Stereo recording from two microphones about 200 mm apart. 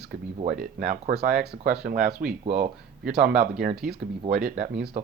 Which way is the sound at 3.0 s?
5° right (ahead or behind).